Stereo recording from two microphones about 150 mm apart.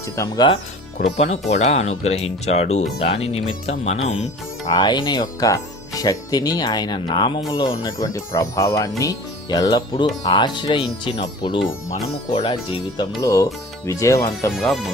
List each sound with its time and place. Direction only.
0.0 s speech: 20° left (ahead or behind)
1.0 s speech: 50° left (ahead or behind)
4.7 s speech: 30° left (ahead or behind)
13.2 s speech: 20° left (ahead or behind)
14.5 s speech: centre (ahead or behind)